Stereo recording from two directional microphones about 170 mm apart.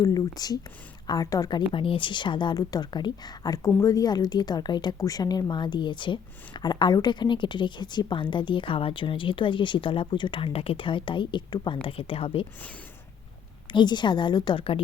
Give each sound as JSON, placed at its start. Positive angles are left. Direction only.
{"t": 0.0, "sound": "speech", "side_deg": 20}
{"t": 13.7, "sound": "speech", "side_deg": 25}